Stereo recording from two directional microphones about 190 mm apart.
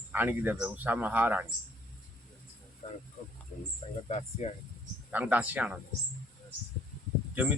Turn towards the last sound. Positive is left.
turn(degrees=-10)  # may be behind; listen again after turning